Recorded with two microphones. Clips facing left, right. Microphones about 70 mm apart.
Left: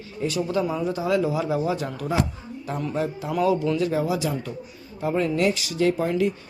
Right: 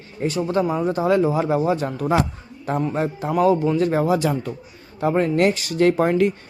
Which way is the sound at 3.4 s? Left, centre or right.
Right.